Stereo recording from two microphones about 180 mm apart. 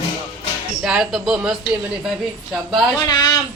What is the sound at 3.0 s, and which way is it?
Speech, 20° left (ahead or behind).